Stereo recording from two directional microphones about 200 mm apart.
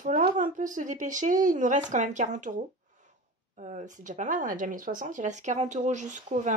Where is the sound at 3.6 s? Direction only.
40° right (ahead or behind).